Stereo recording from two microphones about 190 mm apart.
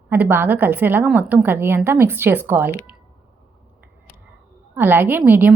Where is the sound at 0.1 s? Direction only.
10° right (ahead or behind).